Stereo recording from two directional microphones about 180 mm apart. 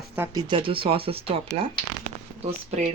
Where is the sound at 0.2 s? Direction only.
25° right (ahead or behind).